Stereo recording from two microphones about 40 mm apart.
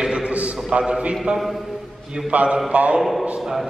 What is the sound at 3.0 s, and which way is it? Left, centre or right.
Speech, centre.